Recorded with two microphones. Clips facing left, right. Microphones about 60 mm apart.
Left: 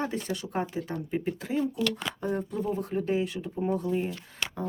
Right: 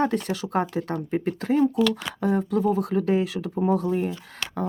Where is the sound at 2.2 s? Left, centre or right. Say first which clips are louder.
Right 8 dB; right.